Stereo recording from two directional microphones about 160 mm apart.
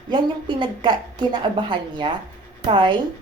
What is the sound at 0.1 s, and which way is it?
A woman's voice, 30° right (ahead or behind).